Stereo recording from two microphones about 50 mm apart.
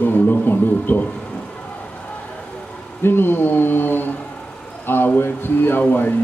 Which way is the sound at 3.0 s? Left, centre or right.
Left.